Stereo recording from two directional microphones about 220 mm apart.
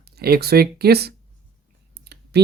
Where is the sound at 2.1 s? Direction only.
45° right (ahead or behind).